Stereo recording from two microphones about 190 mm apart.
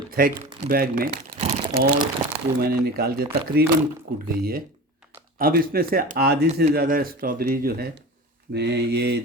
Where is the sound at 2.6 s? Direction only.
55° right (ahead or behind).